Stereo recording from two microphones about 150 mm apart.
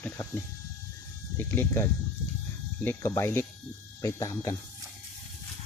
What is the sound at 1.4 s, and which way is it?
Speech, 15° left (ahead or behind).